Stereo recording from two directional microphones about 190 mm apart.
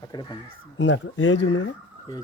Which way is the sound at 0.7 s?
80° left.